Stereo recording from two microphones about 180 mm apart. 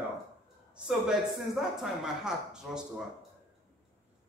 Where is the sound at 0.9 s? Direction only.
Centre (ahead or behind).